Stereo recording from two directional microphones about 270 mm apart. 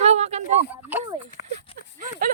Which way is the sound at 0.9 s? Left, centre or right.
Centre.